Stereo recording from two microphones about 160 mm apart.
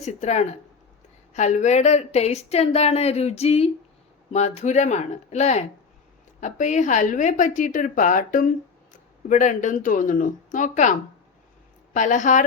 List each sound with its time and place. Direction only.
0.0 s a woman's voice: 45° left (ahead or behind)
11.9 s a woman's voice: 50° left (ahead or behind)